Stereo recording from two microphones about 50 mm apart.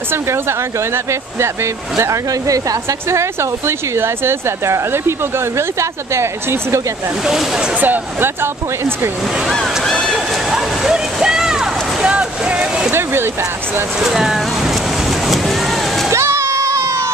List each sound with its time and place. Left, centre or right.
0.1 s speech: right
7.2 s speech: centre
7.7 s speech: right
8.4 s speech: right
9.8 s a sound: centre
10.1 s a sound: centre
12.9 s a sound: right
13.9 s boat: centre
16.1 s crowd: right